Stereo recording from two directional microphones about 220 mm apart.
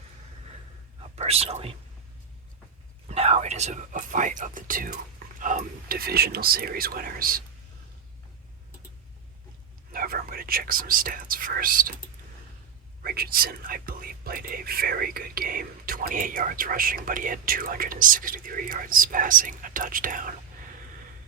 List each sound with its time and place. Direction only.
1.1 s speech: 30° right (ahead or behind)
3.1 s speech: 30° right (ahead or behind)
9.9 s speech: 40° right (ahead or behind)
13.0 s speech: 45° right (ahead or behind)